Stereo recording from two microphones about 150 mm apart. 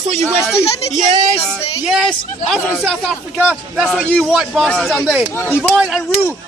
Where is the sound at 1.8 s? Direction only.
Centre (ahead or behind).